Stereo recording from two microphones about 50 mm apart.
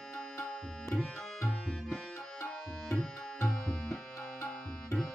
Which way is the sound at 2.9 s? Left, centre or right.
Centre.